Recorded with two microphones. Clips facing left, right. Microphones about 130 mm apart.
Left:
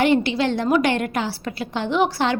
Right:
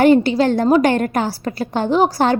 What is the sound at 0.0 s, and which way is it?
A woman's voice, 40° right (ahead or behind).